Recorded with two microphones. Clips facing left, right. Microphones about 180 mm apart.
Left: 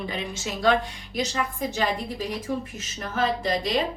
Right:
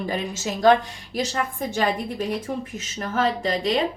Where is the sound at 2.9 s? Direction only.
50° right (ahead or behind).